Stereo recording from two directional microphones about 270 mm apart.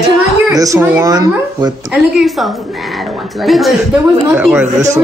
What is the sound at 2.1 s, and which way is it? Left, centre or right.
A woman's voice, centre.